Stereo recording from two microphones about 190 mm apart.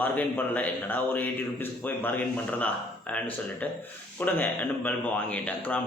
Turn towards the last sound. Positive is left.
turn(degrees=5)  # may be behind; listen again after turning